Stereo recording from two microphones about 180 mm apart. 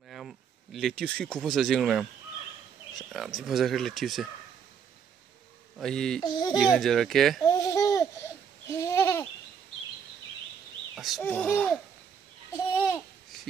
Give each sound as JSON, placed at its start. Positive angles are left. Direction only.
{"t": 0.1, "sound": "speech", "side_deg": 0}
{"t": 5.8, "sound": "speech", "side_deg": 5}
{"t": 6.2, "sound": "speech", "side_deg": 25}
{"t": 6.6, "sound": "speech", "side_deg": 0}
{"t": 7.4, "sound": "babbling", "side_deg": 20}
{"t": 8.6, "sound": "a sound", "side_deg": 15}
{"t": 11.0, "sound": "speech", "side_deg": 0}
{"t": 12.7, "sound": "babbling", "side_deg": 10}